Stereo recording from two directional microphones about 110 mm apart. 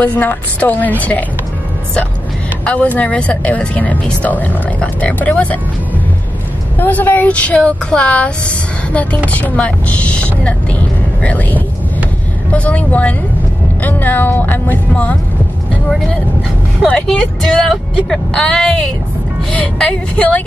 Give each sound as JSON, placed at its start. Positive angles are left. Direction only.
{"t": 0.0, "sound": "speech", "side_deg": 15}
{"t": 2.6, "sound": "speech", "side_deg": 10}
{"t": 6.8, "sound": "speech", "side_deg": 15}
{"t": 16.8, "sound": "speech", "side_deg": 5}